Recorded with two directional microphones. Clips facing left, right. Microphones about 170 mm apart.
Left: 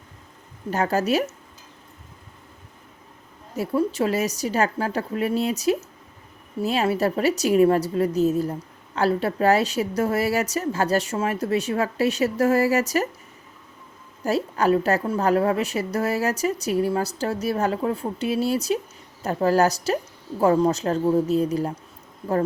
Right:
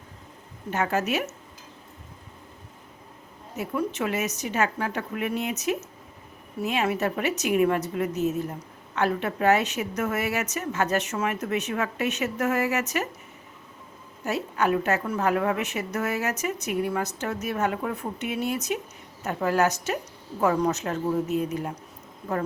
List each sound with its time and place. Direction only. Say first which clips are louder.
0.7 s a woman's voice: left 4 dB; 35° left (ahead or behind)
3.5 s a woman's voice: left 5 dB; 35° left (ahead or behind)
14.3 s a woman's voice: left 4 dB; 35° left (ahead or behind)